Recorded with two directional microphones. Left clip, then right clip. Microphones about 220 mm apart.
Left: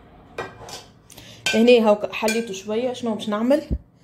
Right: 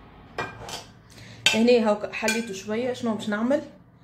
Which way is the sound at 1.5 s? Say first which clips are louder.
Left 6 dB; 30° left (ahead or behind).